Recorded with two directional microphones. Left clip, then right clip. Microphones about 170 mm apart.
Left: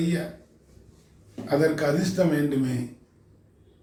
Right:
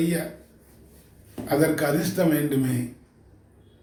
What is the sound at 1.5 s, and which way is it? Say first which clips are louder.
Speech: even; 15° right (ahead or behind).